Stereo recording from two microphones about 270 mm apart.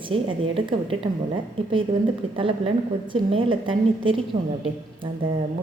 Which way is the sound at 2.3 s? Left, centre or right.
Centre.